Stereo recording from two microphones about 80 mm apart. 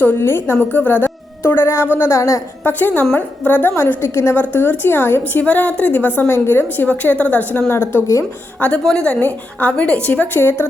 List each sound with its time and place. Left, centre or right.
0.0 s a woman's voice: left
2.6 s a woman's voice: left
8.8 s a woman's voice: centre; by 10.7 s left